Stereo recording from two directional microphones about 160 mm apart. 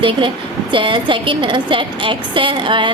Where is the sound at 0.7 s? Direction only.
30° right (ahead or behind).